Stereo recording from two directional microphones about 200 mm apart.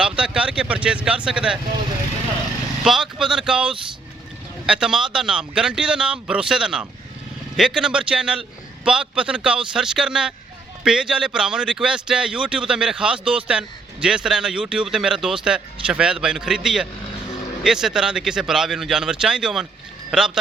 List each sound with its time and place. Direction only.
0.0 s speech: 5° right (ahead or behind)
2.8 s a man's voice: 5° right (ahead or behind)